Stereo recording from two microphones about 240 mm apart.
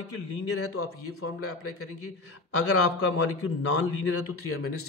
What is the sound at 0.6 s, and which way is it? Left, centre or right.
Speech, left.